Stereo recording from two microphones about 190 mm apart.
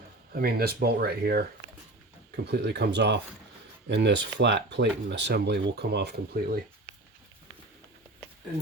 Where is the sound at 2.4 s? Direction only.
60° right (ahead or behind).